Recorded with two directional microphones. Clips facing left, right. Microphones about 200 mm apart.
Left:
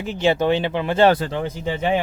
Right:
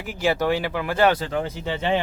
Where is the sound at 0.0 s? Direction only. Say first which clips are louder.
Left 4 dB; 25° left (ahead or behind).